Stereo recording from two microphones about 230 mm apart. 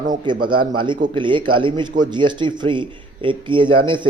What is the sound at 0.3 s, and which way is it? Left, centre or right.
Speech, centre.